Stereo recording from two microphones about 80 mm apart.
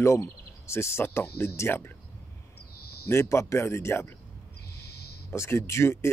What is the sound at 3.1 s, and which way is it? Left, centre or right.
Speech, left.